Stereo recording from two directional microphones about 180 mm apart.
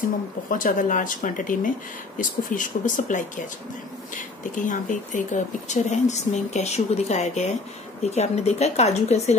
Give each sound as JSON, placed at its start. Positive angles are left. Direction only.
{"t": 0.5, "sound": "speech", "side_deg": 50}
{"t": 4.6, "sound": "speech", "side_deg": 45}